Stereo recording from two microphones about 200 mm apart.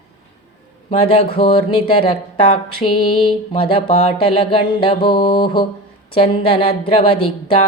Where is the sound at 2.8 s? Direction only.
30° left (ahead or behind).